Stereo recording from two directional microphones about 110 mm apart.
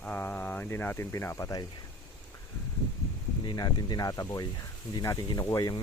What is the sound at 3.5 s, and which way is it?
Speech, 40° left (ahead or behind).